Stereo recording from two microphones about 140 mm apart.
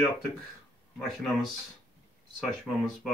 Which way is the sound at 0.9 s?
Centre (ahead or behind).